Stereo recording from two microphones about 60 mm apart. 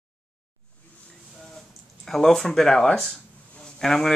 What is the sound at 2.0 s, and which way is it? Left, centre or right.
A man's voice, centre.